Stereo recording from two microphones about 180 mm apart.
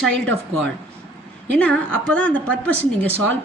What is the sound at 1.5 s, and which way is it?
A woman's voice, 5° left (ahead or behind).